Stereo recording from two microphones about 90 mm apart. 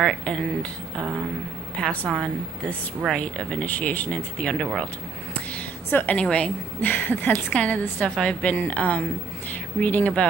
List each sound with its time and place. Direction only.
0.0 s speech: 5° left (ahead or behind)
2.0 s a woman's voice: 5° left (ahead or behind)
5.3 s a sound: 20° left (ahead or behind)
6.2 s a woman's voice: 15° left (ahead or behind)